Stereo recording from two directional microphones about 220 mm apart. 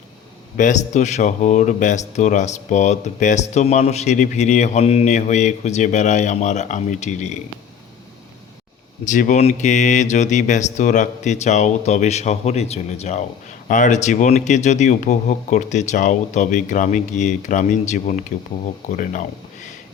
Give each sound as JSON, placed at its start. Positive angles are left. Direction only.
{"t": 0.5, "sound": "speech", "side_deg": 35}
{"t": 9.0, "sound": "speech", "side_deg": 35}